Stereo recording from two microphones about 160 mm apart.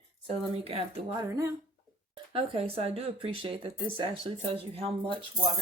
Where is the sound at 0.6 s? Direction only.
40° right (ahead or behind).